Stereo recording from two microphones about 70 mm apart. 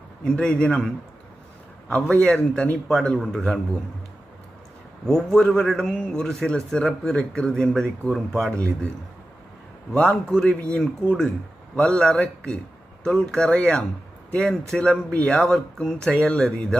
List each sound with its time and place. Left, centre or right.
0.3 s a man's voice: centre
5.0 s a man's voice: centre
9.9 s a man's voice: left
10.2 s a man's voice: centre